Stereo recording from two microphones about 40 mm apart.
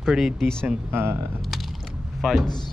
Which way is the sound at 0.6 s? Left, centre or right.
Right.